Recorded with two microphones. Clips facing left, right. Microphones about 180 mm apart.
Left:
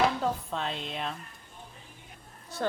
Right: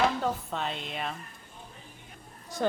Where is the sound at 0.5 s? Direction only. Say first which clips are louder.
Even; centre (ahead or behind).